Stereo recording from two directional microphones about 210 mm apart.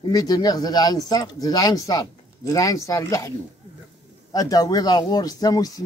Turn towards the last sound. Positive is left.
turn(degrees=15)  # may be behind; listen again after turning